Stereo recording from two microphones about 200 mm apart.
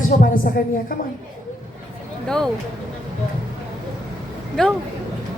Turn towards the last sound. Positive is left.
turn(degrees=0)  # may be behind; listen again after turning